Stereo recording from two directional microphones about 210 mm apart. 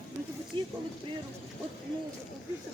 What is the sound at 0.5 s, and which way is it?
Speech, 20° right (ahead or behind).